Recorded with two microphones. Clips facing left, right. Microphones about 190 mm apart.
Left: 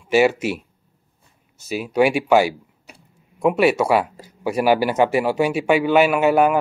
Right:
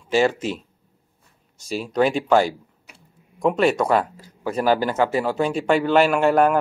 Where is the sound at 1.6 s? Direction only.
5° left (ahead or behind).